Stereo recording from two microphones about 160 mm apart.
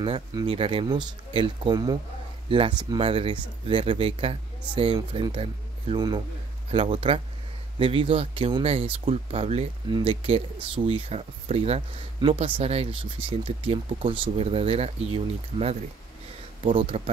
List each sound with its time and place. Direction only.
0.0 s speech: 25° right (ahead or behind)